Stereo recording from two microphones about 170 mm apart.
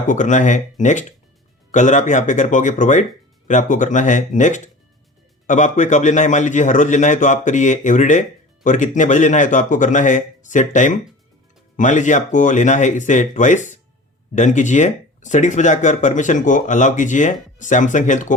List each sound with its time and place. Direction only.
0.1 s speech: 45° left (ahead or behind)